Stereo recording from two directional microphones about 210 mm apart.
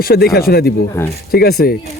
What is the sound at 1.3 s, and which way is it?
Speech, 45° left (ahead or behind).